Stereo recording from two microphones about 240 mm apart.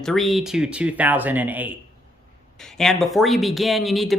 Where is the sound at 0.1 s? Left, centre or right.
Centre.